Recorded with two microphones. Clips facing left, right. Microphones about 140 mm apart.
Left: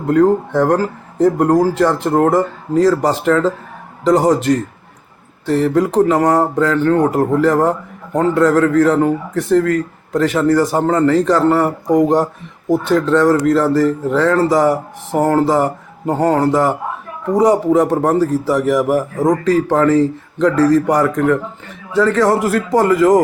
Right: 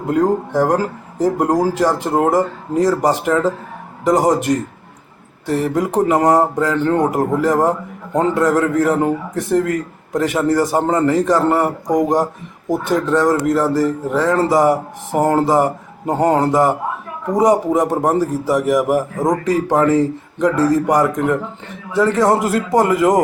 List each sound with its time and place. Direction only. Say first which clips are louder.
0.1 s a man's voice: left 4 dB; 15° right (ahead or behind)